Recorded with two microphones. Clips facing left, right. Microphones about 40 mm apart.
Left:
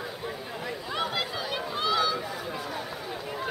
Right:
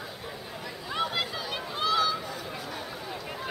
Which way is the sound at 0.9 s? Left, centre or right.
Centre.